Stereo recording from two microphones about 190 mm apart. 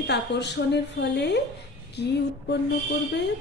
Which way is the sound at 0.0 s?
65° left (ahead or behind).